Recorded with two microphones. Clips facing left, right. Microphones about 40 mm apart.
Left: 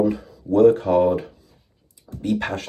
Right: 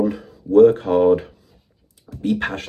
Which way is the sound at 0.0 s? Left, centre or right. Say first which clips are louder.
Even; right.